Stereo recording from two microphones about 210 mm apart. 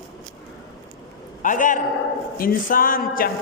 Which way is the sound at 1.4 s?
40° left (ahead or behind).